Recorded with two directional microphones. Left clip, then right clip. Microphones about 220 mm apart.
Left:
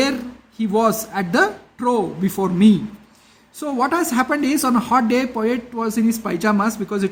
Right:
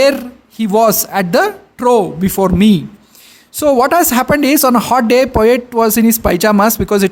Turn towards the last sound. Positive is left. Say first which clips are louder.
# right 10 dB
turn(degrees=-50)  # may be behind; listen again after turning